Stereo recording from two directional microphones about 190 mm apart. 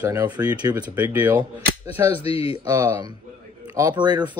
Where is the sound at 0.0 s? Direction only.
20° right (ahead or behind).